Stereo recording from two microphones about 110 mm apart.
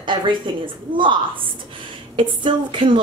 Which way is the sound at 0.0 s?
45° right (ahead or behind).